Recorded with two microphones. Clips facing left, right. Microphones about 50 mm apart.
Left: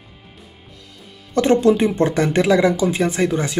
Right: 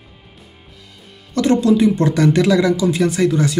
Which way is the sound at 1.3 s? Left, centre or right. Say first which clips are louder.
Even; left.